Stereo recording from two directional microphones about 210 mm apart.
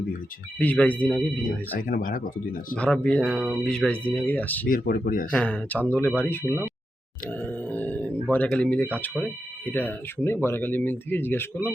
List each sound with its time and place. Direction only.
0.6 s speech: 5° left (ahead or behind)
1.9 s speech: 40° left (ahead or behind)
2.7 s speech: 5° left (ahead or behind)
4.7 s speech: 40° left (ahead or behind)
5.3 s speech: 5° left (ahead or behind)
7.3 s a sound: 10° left (ahead or behind)
9.6 s speech: 10° left (ahead or behind)